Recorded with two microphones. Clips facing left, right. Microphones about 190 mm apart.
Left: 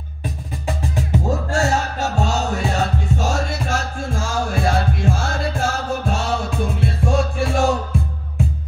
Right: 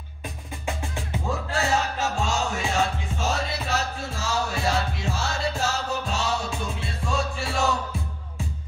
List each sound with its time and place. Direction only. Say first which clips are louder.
0.7 s music: left 7 dB; 40° left (ahead or behind)